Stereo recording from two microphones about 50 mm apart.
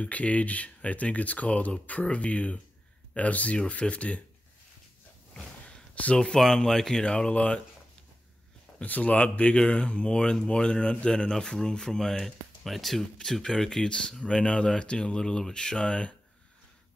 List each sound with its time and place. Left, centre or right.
0.0 s speech: left
5.3 s a sound: centre
6.1 s speech: centre
8.8 s speech: left